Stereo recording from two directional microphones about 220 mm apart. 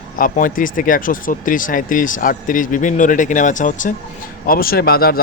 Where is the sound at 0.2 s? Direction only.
40° left (ahead or behind).